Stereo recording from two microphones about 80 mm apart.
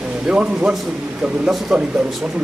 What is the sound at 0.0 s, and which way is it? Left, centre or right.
A man's voice, centre.